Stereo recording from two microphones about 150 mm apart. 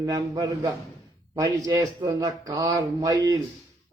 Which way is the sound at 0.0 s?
25° right (ahead or behind).